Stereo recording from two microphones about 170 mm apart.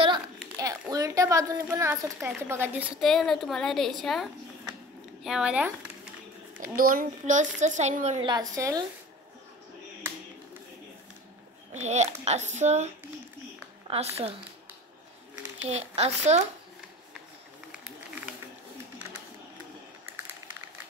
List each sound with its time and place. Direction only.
0.6 s a woman's voice: 20° right (ahead or behind)
3.0 s a woman's voice: centre (ahead or behind)
6.8 s a woman's voice: 55° right (ahead or behind)
8.2 s speech: 25° right (ahead or behind)
11.7 s a woman's voice: 40° right (ahead or behind)
15.7 s speech: 40° right (ahead or behind)